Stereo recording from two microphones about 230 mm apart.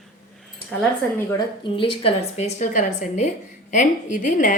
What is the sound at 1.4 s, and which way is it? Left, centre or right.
A woman's voice, left.